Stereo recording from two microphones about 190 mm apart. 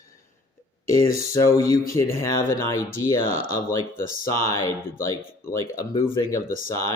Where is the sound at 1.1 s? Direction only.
15° left (ahead or behind).